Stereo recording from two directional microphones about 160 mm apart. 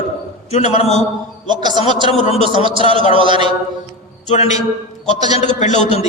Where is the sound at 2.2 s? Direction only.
40° left (ahead or behind).